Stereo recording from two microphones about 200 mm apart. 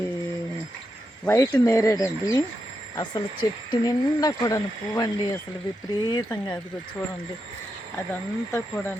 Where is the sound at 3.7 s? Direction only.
20° left (ahead or behind).